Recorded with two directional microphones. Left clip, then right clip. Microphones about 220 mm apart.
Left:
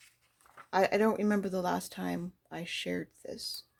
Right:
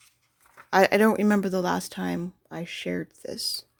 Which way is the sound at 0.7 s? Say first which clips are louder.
Right 8 dB; 35° right (ahead or behind).